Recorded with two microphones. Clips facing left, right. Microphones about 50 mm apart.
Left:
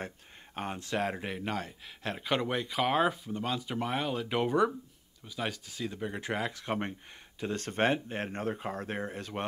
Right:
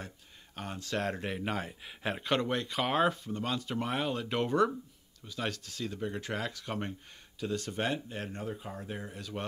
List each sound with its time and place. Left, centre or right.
0.6 s speech: left
0.9 s speech: centre
2.2 s speech: centre; by 8.5 s left
8.5 s speech: left